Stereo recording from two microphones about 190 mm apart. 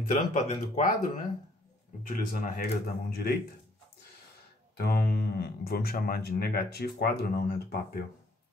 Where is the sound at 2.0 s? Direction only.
45° left (ahead or behind).